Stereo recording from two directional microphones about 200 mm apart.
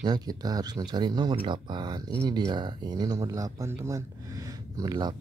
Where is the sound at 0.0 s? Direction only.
20° right (ahead or behind).